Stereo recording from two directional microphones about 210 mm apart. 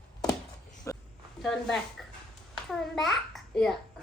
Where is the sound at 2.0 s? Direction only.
Centre (ahead or behind).